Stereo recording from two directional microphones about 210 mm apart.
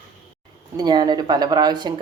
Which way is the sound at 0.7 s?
20° right (ahead or behind).